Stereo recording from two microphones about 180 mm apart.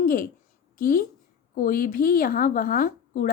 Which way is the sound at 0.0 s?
55° left (ahead or behind).